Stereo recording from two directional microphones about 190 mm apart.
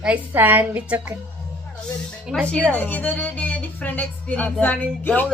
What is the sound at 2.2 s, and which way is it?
A woman's voice, centre (ahead or behind).